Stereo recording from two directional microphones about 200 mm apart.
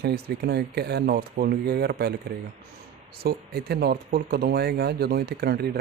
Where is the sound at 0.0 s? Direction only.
50° right (ahead or behind).